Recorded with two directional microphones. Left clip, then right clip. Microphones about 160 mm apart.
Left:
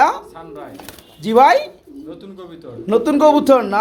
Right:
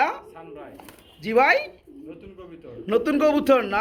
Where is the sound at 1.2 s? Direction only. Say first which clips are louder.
Left 7 dB; 15° left (ahead or behind).